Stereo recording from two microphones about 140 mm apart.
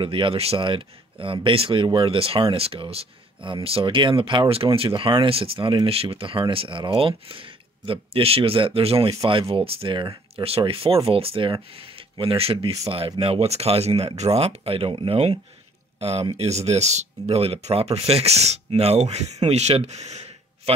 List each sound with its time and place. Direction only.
0.0 s speech: 40° right (ahead or behind)